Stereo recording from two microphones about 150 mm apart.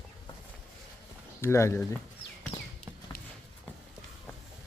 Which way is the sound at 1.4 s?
20° left (ahead or behind).